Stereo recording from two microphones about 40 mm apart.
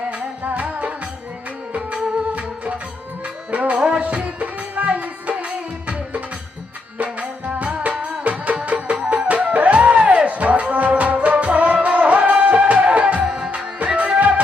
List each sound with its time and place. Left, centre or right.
3.5 s music: right
3.8 s music: right
4.0 s music: right
13.2 s music: right
13.7 s music: right